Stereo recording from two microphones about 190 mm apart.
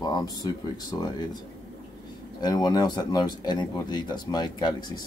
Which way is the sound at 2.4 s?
20° left (ahead or behind).